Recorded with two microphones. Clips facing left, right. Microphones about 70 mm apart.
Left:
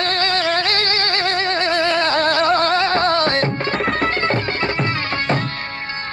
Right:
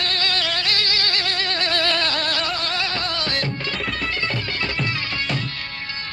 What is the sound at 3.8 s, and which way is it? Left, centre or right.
Music, left.